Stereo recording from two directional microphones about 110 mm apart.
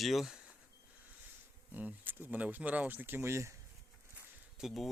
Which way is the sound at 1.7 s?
15° right (ahead or behind).